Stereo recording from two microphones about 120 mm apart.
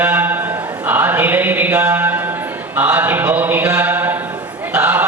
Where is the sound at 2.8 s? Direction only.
15° right (ahead or behind).